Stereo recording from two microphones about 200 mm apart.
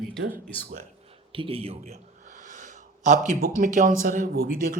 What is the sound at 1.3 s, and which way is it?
A man's voice, 25° right (ahead or behind).